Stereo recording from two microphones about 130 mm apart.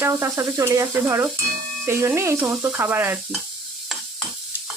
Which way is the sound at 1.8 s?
20° right (ahead or behind).